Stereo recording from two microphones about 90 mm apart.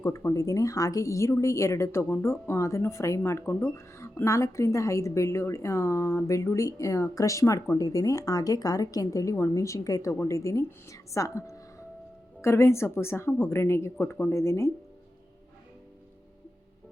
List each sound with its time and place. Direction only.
0.0 s speech: 25° left (ahead or behind)